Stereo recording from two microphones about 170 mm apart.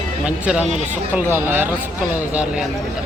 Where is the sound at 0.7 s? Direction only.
40° right (ahead or behind).